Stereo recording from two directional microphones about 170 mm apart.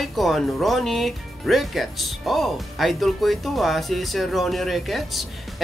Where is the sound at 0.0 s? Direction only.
Centre (ahead or behind).